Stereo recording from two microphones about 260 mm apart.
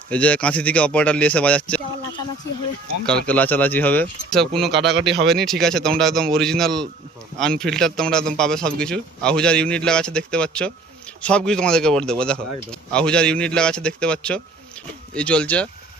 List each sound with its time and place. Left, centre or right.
0.1 s a man's voice: centre
3.2 s a man's voice: centre
4.8 s speech: right
5.2 s a man's voice: centre